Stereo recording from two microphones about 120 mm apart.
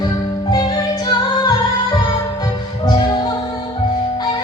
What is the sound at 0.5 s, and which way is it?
Music, 35° left (ahead or behind).